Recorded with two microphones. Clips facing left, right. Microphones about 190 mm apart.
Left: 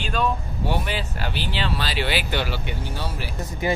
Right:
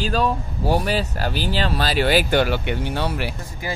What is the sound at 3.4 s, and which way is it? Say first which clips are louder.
Speech: left 5 dB; 20° left (ahead or behind).